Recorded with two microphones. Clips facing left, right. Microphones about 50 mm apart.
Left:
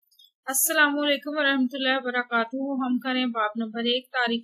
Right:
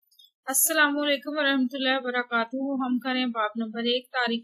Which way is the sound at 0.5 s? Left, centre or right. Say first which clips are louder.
Left 1 dB; left.